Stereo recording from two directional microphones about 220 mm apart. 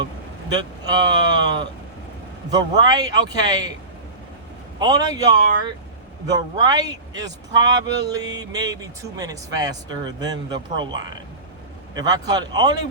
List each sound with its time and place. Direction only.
0.5 s speech: 20° right (ahead or behind)
4.8 s speech: 15° right (ahead or behind)
11.9 s speech: 15° right (ahead or behind)